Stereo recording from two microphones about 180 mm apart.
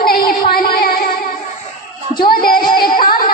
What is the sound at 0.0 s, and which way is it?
Music, 55° left (ahead or behind).